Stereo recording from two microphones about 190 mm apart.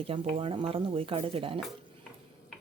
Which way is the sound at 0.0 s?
30° right (ahead or behind).